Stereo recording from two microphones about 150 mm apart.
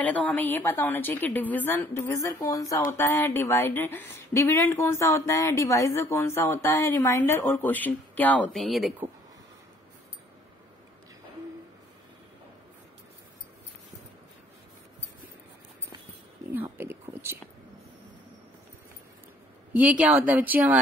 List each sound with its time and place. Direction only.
0.0 s a woman's voice: 10° left (ahead or behind)
16.5 s a sound: 15° right (ahead or behind)
19.7 s speech: 10° right (ahead or behind)